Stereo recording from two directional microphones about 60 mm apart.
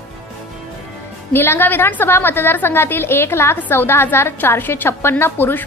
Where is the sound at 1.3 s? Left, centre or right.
Left.